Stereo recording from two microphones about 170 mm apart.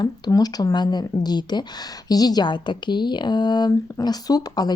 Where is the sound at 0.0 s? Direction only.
20° left (ahead or behind).